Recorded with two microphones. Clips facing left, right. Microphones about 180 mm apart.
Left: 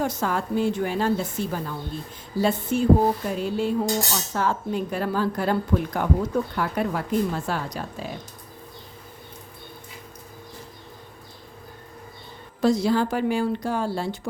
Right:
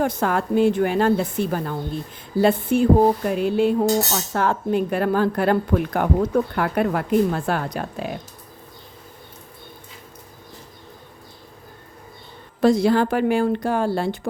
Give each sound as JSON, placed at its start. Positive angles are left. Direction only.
{"t": 0.0, "sound": "cutlery", "side_deg": -55}
{"t": 12.6, "sound": "cutlery", "side_deg": -60}